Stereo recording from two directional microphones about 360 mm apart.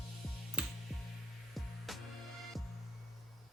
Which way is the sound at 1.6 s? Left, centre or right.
Centre.